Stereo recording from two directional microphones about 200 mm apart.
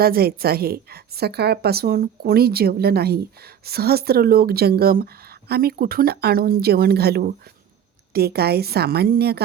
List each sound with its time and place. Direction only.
0.0 s a woman's voice: 50° right (ahead or behind)